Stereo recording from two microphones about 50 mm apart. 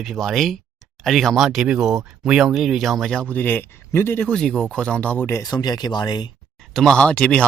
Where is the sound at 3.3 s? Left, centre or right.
Left.